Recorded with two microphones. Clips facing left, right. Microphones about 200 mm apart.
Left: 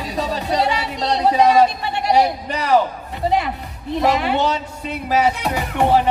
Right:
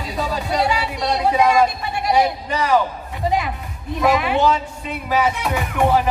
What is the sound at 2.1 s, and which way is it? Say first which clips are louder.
Speech: left 1 dB; 40° left (ahead or behind).